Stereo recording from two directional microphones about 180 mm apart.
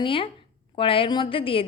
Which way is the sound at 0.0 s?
30° left (ahead or behind).